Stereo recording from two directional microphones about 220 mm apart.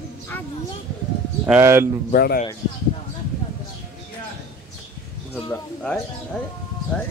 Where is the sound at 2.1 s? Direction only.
45° left (ahead or behind).